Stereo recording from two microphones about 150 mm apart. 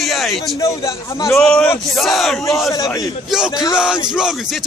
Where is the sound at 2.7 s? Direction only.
25° left (ahead or behind).